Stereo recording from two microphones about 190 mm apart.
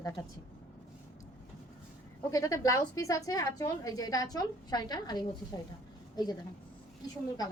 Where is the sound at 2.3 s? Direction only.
20° left (ahead or behind).